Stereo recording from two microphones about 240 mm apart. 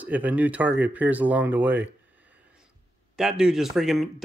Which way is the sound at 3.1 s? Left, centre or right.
Centre.